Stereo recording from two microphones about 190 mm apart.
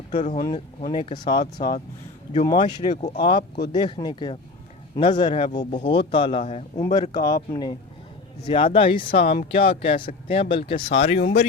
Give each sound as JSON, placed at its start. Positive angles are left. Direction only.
{"t": 0.1, "sound": "speech", "side_deg": 40}
{"t": 0.9, "sound": "speech", "side_deg": 25}
{"t": 2.3, "sound": "speech", "side_deg": 35}
{"t": 2.6, "sound": "speech", "side_deg": 25}
{"t": 2.9, "sound": "speech", "side_deg": 40}
{"t": 3.2, "sound": "speech", "side_deg": 25}
{"t": 11.2, "sound": "speech", "side_deg": 70}